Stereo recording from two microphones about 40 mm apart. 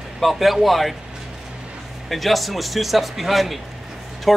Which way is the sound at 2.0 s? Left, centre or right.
Centre.